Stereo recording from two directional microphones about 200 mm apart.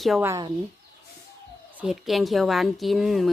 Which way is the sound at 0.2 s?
15° right (ahead or behind).